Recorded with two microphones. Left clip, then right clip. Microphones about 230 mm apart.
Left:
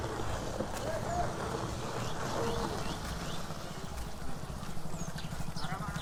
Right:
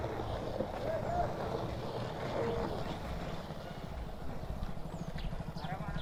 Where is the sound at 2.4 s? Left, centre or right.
Centre.